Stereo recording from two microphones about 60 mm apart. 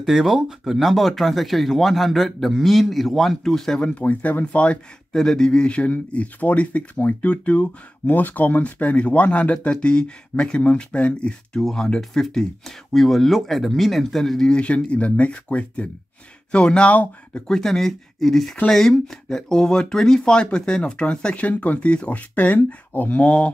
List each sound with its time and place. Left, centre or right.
0.0 s speech: centre
3.8 s speech: left
5.1 s speech: centre
14.5 s speech: centre
17.5 s speech: centre